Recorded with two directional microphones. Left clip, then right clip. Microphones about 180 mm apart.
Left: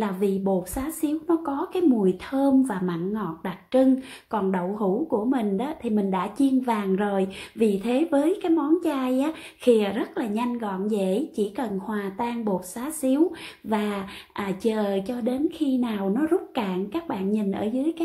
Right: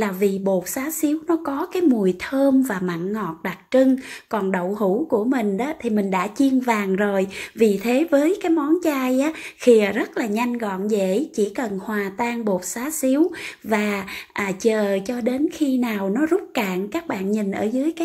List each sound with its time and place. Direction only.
0.0 s speech: 20° right (ahead or behind)